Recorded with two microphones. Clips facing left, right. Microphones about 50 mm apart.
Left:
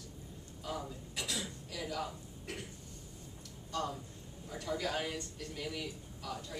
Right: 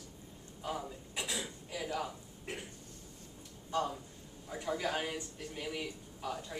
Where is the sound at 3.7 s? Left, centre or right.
Centre.